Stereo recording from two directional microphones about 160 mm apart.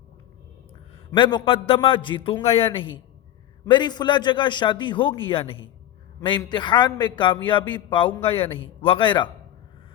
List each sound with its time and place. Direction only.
1.1 s a man's voice: 30° left (ahead or behind)